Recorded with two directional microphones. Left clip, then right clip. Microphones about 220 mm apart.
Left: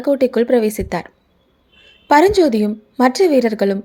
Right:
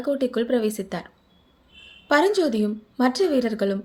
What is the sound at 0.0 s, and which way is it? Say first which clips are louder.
A woman's voice: left 9 dB; 30° left (ahead or behind).